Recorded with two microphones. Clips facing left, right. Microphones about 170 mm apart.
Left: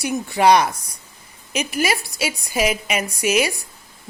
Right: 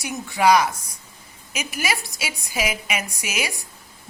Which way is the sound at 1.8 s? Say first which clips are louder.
Left 5 dB; 40° left (ahead or behind).